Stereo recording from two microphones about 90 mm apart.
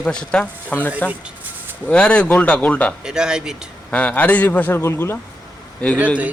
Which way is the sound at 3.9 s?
15° left (ahead or behind).